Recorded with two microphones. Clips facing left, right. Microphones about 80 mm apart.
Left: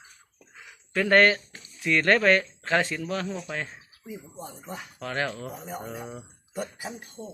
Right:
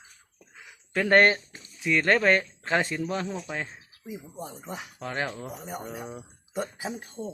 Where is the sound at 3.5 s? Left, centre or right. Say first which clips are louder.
Even; centre.